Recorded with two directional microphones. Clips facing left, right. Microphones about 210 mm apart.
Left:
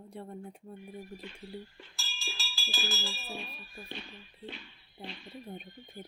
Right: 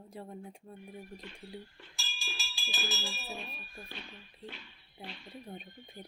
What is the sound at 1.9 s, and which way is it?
Music, 20° right (ahead or behind).